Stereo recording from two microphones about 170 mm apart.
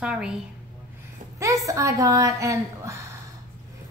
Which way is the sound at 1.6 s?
20° right (ahead or behind).